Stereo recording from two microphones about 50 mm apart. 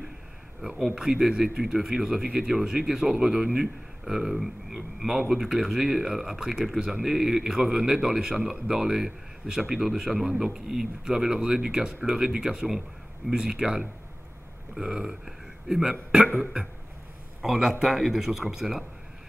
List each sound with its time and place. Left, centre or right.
0.9 s speech: centre
17.4 s a man's voice: centre